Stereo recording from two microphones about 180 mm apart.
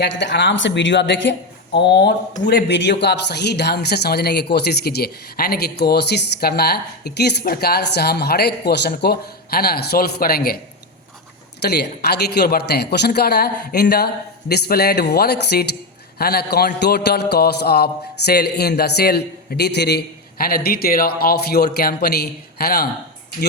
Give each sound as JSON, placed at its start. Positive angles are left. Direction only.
{"t": 0.0, "sound": "speech", "side_deg": 80}
{"t": 11.6, "sound": "speech", "side_deg": 65}
{"t": 20.4, "sound": "speech", "side_deg": 55}